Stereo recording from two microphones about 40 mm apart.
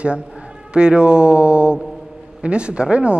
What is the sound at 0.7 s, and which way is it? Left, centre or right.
Speech, right.